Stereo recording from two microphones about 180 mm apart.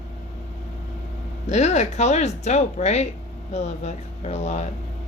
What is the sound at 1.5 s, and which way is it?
Speech, 40° left (ahead or behind).